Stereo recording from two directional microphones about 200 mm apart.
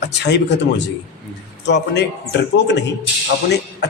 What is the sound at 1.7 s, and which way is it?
A man's voice, 55° left (ahead or behind).